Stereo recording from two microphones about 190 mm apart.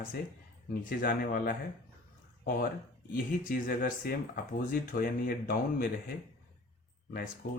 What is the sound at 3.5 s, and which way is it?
Speech, 50° left (ahead or behind).